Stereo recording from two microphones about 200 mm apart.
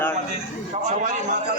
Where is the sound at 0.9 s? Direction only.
35° right (ahead or behind).